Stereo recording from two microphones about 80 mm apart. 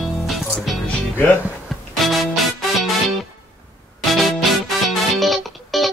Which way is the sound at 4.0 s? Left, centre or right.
Centre.